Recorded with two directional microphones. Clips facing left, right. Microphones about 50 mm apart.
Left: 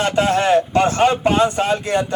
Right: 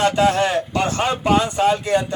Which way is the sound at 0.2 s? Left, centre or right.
Left.